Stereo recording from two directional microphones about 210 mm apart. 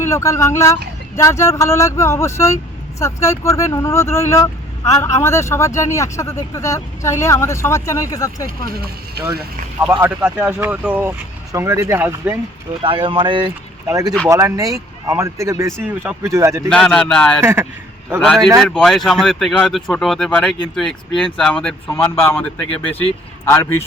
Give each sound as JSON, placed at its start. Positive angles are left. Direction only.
{"t": 0.0, "sound": "speech", "side_deg": 15}
{"t": 8.4, "sound": "speech", "side_deg": -45}
{"t": 9.8, "sound": "speech", "side_deg": -10}
{"t": 12.8, "sound": "speech", "side_deg": -25}
{"t": 16.6, "sound": "speech", "side_deg": 0}
{"t": 17.4, "sound": "speech", "side_deg": -10}
{"t": 18.2, "sound": "speech", "side_deg": 0}